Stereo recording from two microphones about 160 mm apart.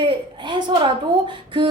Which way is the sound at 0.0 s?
30° right (ahead or behind).